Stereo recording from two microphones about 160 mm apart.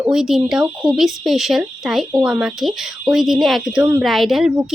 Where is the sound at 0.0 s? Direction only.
5° right (ahead or behind).